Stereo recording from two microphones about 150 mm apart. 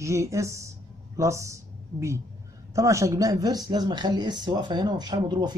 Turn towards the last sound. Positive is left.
turn(degrees=-30)  # may be behind; listen again after turning